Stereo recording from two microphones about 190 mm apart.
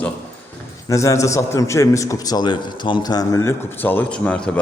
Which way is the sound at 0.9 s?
15° left (ahead or behind).